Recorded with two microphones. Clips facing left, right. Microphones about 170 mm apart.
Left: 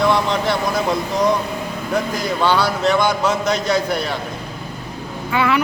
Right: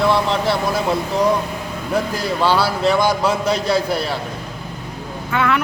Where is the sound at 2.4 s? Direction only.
5° right (ahead or behind).